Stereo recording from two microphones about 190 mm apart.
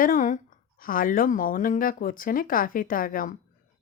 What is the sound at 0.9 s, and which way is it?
Speech, 45° left (ahead or behind).